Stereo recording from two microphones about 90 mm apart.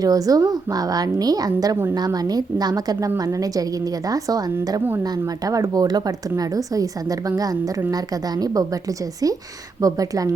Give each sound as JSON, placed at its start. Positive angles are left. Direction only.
{"t": 0.0, "sound": "a woman's voice", "side_deg": -40}
{"t": 1.7, "sound": "a woman's voice", "side_deg": -25}
{"t": 2.0, "sound": "a woman's voice", "side_deg": -45}
{"t": 5.5, "sound": "a woman's voice", "side_deg": -40}
{"t": 9.8, "sound": "speech", "side_deg": -40}